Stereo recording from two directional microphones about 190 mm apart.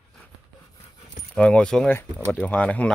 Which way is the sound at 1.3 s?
5° left (ahead or behind).